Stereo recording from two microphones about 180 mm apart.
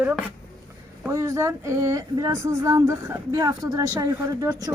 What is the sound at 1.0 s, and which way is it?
Speech, 15° right (ahead or behind).